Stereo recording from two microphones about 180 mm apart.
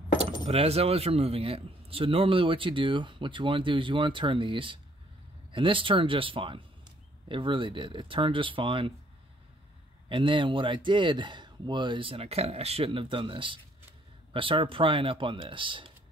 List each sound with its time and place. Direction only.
0.5 s a man's voice: 35° right (ahead or behind)
10.0 s a man's voice: 30° right (ahead or behind)